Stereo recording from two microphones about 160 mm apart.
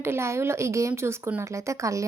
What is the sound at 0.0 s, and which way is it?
A woman's voice, 15° right (ahead or behind).